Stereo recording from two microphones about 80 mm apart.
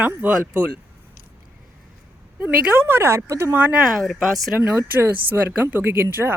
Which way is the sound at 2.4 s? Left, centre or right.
Right.